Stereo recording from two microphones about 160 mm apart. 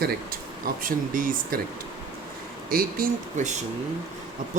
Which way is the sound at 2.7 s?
65° right (ahead or behind).